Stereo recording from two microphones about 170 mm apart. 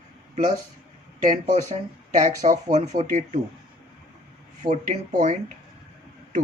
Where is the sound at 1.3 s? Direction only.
45° right (ahead or behind).